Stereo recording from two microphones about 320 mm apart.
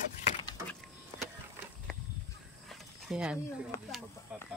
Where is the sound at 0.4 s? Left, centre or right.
Centre.